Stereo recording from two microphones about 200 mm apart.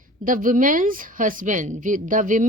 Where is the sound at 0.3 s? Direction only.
40° right (ahead or behind).